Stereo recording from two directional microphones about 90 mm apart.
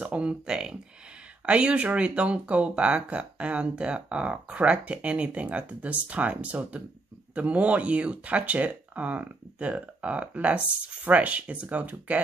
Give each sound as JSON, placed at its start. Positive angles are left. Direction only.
{"t": 0.0, "sound": "speech", "side_deg": -10}